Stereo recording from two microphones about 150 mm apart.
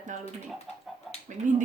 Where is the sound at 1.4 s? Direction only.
55° right (ahead or behind).